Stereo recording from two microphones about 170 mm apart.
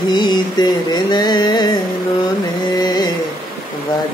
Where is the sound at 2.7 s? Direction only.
25° left (ahead or behind).